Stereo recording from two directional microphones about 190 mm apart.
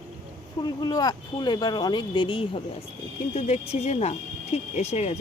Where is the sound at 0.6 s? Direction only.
20° left (ahead or behind).